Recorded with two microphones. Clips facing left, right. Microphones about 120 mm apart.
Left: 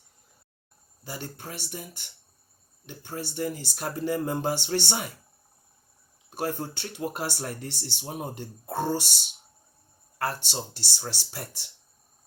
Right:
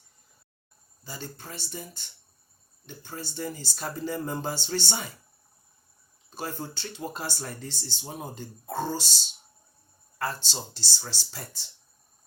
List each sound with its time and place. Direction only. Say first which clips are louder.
1.0 s speech: left 3 dB; 65° left (ahead or behind)
6.3 s speech: left 5 dB; 60° left (ahead or behind)